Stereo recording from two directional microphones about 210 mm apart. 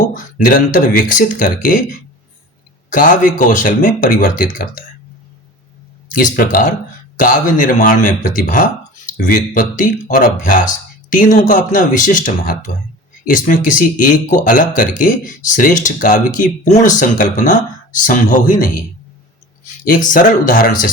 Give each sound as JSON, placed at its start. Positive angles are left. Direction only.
{"t": 0.1, "sound": "speech", "side_deg": 40}
{"t": 6.3, "sound": "speech", "side_deg": 40}
{"t": 19.8, "sound": "speech", "side_deg": 40}